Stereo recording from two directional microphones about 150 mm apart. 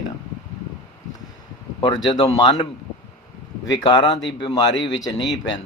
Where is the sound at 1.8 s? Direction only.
30° left (ahead or behind).